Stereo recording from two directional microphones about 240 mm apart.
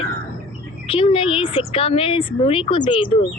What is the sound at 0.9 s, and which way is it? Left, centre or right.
Speech, left.